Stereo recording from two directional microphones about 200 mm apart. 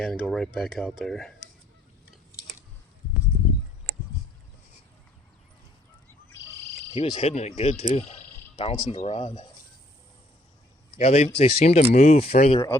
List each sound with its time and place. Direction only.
0.0 s speech: centre (ahead or behind)
6.9 s speech: 30° left (ahead or behind)
10.9 s speech: 35° left (ahead or behind)